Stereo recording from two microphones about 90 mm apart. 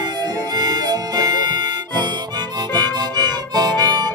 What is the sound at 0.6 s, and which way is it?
Music, 50° right (ahead or behind).